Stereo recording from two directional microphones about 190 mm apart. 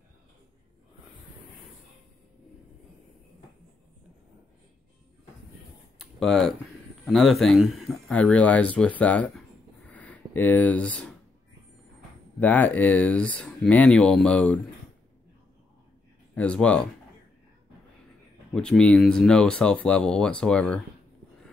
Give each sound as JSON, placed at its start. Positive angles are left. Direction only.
{"t": 5.9, "sound": "a sound", "side_deg": 0}
{"t": 7.1, "sound": "speech", "side_deg": 0}
{"t": 9.8, "sound": "a sound", "side_deg": 10}
{"t": 12.4, "sound": "speech", "side_deg": 10}
{"t": 16.3, "sound": "speech", "side_deg": 5}
{"t": 18.5, "sound": "speech", "side_deg": 5}